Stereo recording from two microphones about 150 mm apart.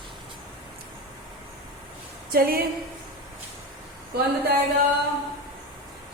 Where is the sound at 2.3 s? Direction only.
80° right.